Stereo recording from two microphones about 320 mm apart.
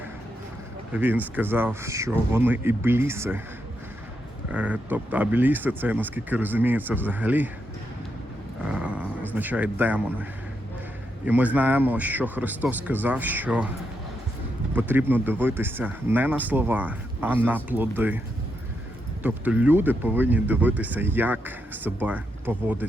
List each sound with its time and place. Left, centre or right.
0.9 s speech: centre
4.5 s speech: centre
8.7 s a sound: centre
11.3 s speech: centre
14.8 s speech: centre
19.2 s speech: centre